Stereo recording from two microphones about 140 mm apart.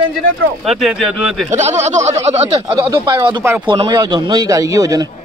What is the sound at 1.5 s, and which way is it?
Speech, 55° right (ahead or behind).